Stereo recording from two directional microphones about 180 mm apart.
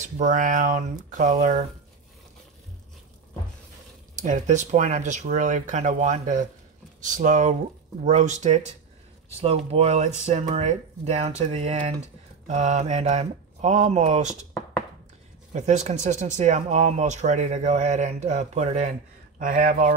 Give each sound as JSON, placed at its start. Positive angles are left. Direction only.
{"t": 0.0, "sound": "speech", "side_deg": -45}
{"t": 4.1, "sound": "speech", "side_deg": -45}
{"t": 15.5, "sound": "speech", "side_deg": -40}